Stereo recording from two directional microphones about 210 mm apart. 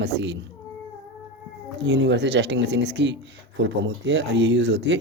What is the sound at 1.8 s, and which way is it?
Speech, 55° right (ahead or behind).